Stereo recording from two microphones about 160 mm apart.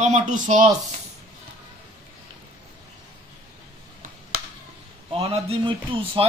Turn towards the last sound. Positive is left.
turn(degrees=-30)  # may be behind; listen again after turning